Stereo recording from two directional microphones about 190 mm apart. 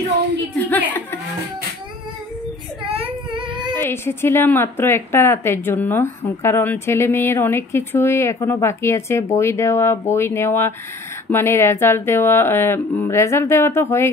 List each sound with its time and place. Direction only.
0.6 s a sound: 10° left (ahead or behind)
2.9 s child singing: 25° right (ahead or behind)
3.7 s a woman's voice: 10° left (ahead or behind)